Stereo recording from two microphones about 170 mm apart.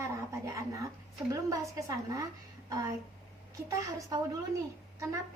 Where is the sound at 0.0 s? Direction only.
15° right (ahead or behind).